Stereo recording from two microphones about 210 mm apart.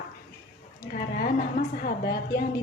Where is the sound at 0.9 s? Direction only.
45° left (ahead or behind).